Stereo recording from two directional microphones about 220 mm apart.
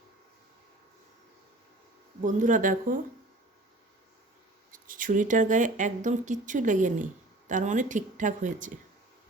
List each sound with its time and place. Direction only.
2.2 s speech: 35° right (ahead or behind)
4.7 s speech: 40° right (ahead or behind)